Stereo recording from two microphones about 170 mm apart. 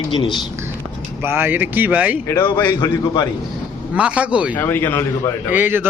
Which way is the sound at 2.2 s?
15° left (ahead or behind).